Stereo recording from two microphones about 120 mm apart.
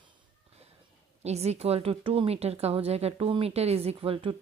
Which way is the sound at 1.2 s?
65° right (ahead or behind).